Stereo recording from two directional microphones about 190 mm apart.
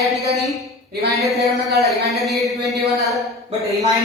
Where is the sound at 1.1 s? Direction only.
Centre (ahead or behind).